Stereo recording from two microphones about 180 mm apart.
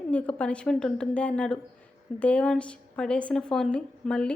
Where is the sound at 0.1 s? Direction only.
5° left (ahead or behind).